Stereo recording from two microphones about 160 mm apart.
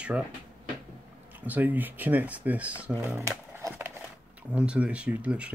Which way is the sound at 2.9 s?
20° right (ahead or behind).